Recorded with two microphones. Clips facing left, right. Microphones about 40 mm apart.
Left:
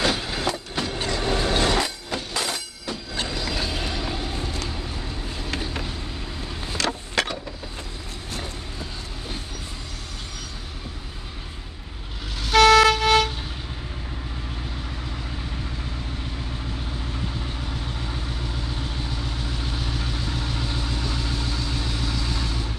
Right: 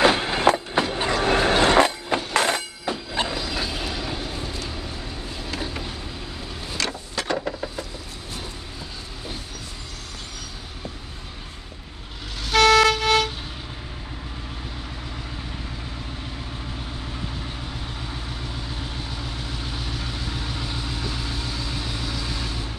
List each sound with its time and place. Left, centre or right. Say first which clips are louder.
0.0 s train: right 6 dB; right
0.8 s train: right 3 dB; right
1.1 s train: right 5 dB; right
1.5 s music: right 7 dB; right
2.3 s a sound: right 6 dB; right
2.9 s train: right 4 dB; centre
3.4 s train: even; centre
4.6 s vehicle: left 1 dB; centre
7.2 s a sound: left 3 dB; left
12.4 s vehicle: left 1 dB; centre
17.0 s vehicle: left 1 dB; centre